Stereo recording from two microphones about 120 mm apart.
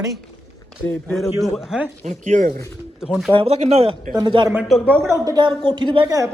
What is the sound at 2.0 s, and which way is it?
Speech, 75° right (ahead or behind).